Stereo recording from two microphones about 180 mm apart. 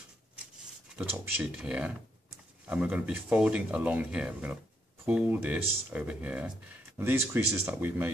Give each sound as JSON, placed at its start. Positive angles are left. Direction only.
{"t": 0.9, "sound": "speech", "side_deg": -10}